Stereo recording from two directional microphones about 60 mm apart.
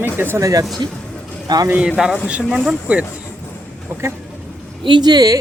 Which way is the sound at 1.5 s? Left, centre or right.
Right.